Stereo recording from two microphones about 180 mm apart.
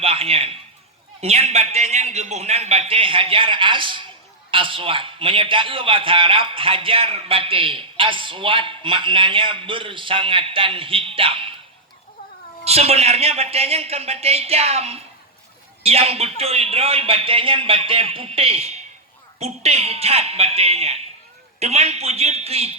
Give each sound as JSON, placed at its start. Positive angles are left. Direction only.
{"t": 0.0, "sound": "a man's voice", "side_deg": -30}
{"t": 12.6, "sound": "speech", "side_deg": -35}